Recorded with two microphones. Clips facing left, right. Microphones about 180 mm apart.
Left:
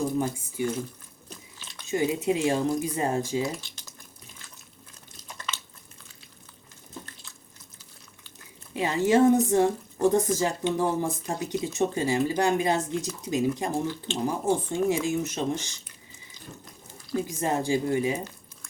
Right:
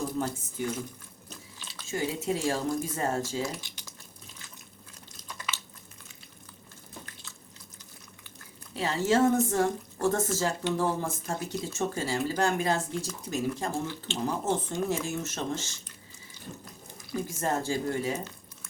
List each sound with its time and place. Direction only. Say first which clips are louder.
0.2 s speech: left 4 dB; 10° left (ahead or behind)
1.9 s speech: left 5 dB; 20° left (ahead or behind)
5.5 s a sound: left 1 dB; 10° right (ahead or behind)
8.7 s speech: left 4 dB; 15° left (ahead or behind)
17.2 s speech: left 2 dB; 15° left (ahead or behind)